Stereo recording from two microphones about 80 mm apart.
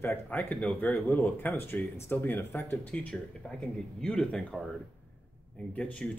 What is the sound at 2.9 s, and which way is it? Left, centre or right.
Speech, centre.